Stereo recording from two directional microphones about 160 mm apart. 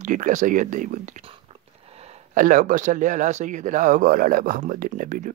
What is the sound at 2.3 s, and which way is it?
A man's voice, 55° right (ahead or behind).